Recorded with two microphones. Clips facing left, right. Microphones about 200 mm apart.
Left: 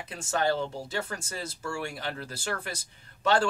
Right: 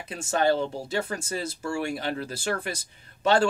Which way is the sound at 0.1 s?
15° right (ahead or behind).